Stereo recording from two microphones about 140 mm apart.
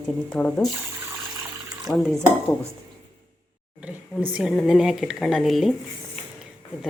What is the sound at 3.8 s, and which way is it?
A woman's voice, 10° right (ahead or behind).